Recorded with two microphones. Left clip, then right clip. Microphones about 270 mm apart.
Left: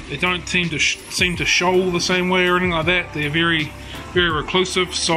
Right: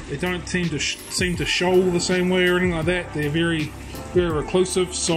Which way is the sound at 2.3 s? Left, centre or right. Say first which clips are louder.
Left 3 dB; left.